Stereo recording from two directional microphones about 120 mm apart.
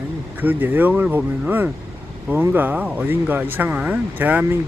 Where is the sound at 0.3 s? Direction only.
15° right (ahead or behind).